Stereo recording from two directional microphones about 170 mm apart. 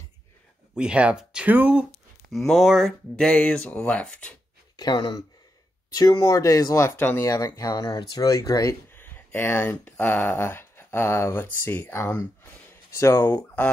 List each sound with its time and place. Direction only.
0.7 s speech: 5° right (ahead or behind)
4.7 s speech: 25° left (ahead or behind); by 13.7 s 10° left (ahead or behind)